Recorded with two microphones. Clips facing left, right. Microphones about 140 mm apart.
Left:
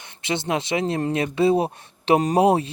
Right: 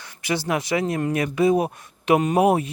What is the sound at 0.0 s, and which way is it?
Speech, 25° left (ahead or behind).